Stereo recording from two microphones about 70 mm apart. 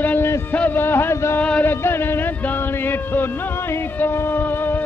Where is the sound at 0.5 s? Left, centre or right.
Left.